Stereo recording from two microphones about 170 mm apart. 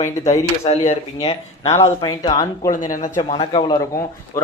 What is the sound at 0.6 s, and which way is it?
Speech, 40° left (ahead or behind).